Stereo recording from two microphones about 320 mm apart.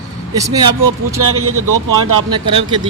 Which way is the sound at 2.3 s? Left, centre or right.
Centre.